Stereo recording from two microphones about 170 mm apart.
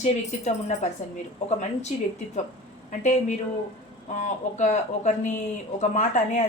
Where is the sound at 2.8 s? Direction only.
45° left (ahead or behind).